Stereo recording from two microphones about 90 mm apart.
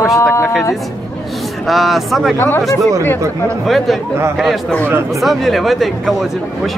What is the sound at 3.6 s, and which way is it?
Speech, centre (ahead or behind).